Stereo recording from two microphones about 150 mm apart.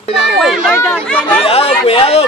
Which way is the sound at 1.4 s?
40° left (ahead or behind).